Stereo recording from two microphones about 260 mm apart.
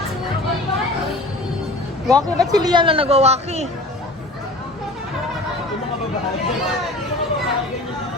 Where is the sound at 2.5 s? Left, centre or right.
Centre.